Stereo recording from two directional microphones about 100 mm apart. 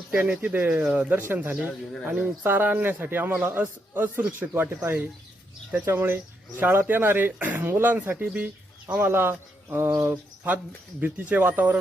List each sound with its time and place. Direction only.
0.1 s a man's voice: 15° right (ahead or behind)
1.6 s speech: 10° left (ahead or behind)
2.0 s a man's voice: 10° right (ahead or behind)